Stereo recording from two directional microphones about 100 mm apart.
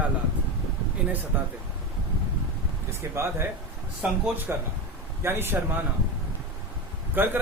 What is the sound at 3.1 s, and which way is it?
Speech, 25° right (ahead or behind).